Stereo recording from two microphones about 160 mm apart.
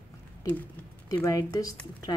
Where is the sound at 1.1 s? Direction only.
20° left (ahead or behind).